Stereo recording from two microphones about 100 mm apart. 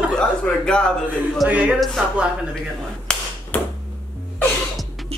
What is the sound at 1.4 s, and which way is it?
Speech, 15° right (ahead or behind).